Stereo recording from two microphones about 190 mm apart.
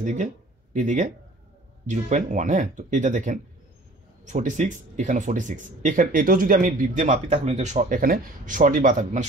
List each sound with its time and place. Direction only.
0.0 s speech: 40° right (ahead or behind)